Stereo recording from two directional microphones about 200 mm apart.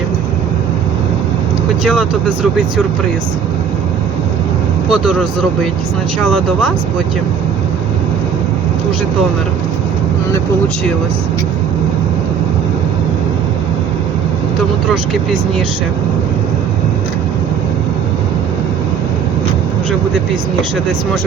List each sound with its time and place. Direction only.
4.9 s speech: centre (ahead or behind)